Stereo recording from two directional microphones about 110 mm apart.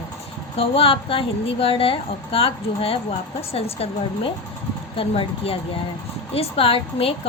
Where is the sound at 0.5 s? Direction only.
55° left (ahead or behind).